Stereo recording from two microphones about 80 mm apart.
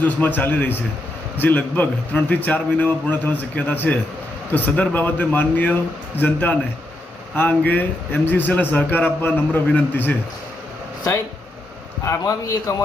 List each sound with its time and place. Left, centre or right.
0.0 s a man's voice: left
12.0 s a man's voice: left